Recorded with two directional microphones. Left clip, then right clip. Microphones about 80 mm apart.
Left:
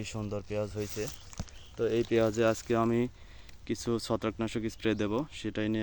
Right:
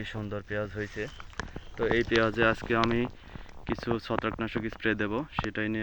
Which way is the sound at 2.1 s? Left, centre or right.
Left.